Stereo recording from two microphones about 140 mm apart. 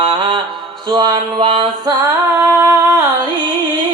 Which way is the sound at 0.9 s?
30° right (ahead or behind).